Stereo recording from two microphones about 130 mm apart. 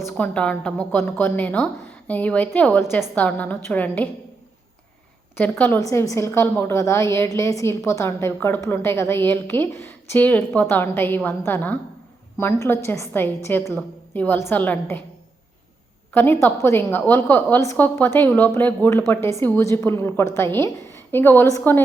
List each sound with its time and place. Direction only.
0.2 s a woman's voice: 10° left (ahead or behind)
5.4 s a woman's voice: 15° left (ahead or behind)
16.1 s a woman's voice: 15° left (ahead or behind)